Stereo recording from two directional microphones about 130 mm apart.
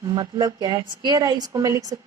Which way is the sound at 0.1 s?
35° right (ahead or behind).